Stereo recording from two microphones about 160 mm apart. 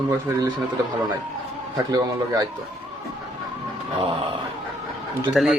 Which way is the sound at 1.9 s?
25° right (ahead or behind).